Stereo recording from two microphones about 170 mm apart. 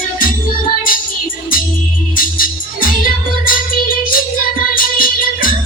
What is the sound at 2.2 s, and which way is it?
Music, 55° left (ahead or behind).